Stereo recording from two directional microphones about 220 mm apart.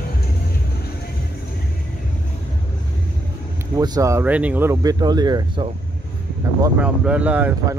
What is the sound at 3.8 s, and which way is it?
Speech, 15° right (ahead or behind).